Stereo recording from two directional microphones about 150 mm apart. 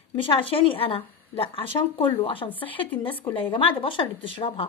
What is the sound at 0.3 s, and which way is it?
A woman's voice, 40° left (ahead or behind).